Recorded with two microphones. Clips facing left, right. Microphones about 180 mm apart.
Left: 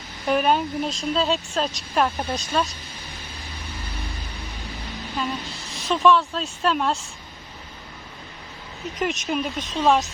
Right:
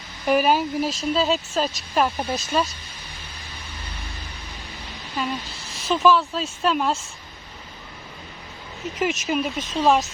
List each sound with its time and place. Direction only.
0.3 s speech: 5° right (ahead or behind)
5.1 s a woman's voice: centre (ahead or behind)
9.0 s speech: centre (ahead or behind)